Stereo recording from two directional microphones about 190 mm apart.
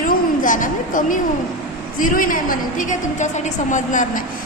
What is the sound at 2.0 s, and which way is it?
A woman's voice, 45° left (ahead or behind).